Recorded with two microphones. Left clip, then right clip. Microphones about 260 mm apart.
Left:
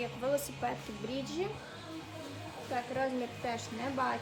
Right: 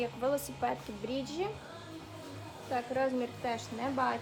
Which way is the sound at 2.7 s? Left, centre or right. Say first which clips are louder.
Right 2 dB; centre.